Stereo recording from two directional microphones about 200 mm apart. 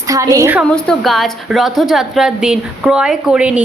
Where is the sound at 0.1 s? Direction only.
15° right (ahead or behind).